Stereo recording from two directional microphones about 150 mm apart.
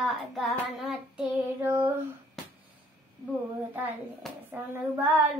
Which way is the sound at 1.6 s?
15° right (ahead or behind).